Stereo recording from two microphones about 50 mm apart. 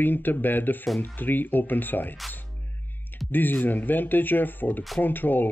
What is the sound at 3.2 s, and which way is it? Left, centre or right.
Speech, left.